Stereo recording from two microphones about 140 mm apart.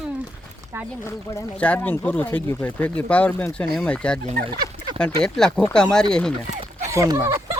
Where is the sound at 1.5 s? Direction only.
10° left (ahead or behind).